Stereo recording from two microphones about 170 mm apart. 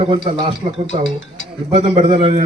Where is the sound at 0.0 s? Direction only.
30° right (ahead or behind).